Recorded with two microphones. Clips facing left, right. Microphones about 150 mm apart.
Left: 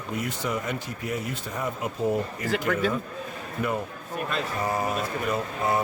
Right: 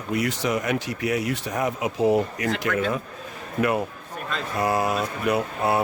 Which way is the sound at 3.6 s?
90° right.